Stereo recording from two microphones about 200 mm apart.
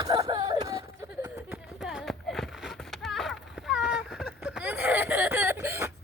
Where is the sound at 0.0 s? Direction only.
20° right (ahead or behind).